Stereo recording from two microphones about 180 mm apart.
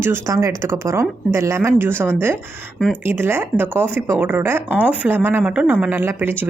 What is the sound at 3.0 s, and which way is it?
Speech, 10° right (ahead or behind).